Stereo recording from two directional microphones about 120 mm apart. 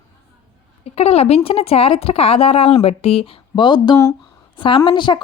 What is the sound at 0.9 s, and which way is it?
A woman's voice, 55° left (ahead or behind).